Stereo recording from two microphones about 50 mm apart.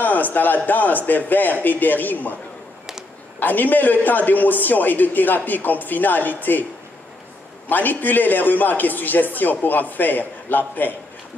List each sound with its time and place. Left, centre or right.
0.0 s a man's voice: left
3.3 s a man's voice: left
7.6 s a man's voice: left